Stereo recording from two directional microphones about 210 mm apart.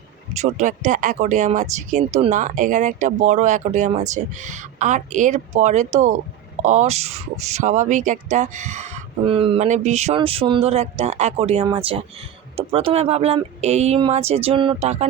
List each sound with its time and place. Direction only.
0.3 s speech: 35° right (ahead or behind)